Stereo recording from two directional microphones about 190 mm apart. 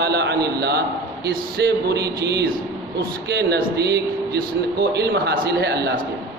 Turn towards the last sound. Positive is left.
turn(degrees=-60)  # may be behind; listen again after turning